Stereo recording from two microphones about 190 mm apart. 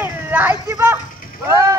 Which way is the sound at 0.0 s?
10° right (ahead or behind).